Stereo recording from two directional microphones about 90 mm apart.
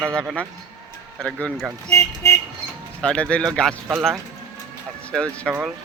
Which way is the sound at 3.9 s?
5° right (ahead or behind).